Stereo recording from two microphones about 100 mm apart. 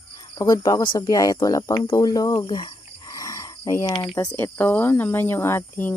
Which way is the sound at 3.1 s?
35° left (ahead or behind).